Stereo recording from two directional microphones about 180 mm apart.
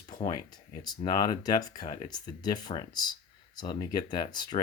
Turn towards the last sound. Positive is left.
turn(degrees=25)  # may be behind; listen again after turning